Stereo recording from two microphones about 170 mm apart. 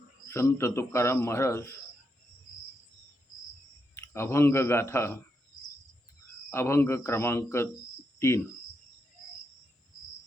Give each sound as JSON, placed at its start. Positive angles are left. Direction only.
{"t": 0.3, "sound": "a man's voice", "side_deg": 15}
{"t": 3.9, "sound": "a man's voice", "side_deg": 15}
{"t": 6.5, "sound": "a man's voice", "side_deg": 15}